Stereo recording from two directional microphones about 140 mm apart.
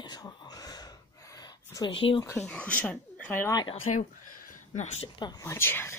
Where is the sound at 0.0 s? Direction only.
30° left (ahead or behind).